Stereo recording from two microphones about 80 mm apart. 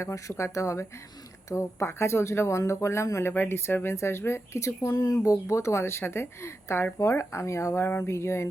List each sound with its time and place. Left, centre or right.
0.0 s speech: left
4.9 s speech: left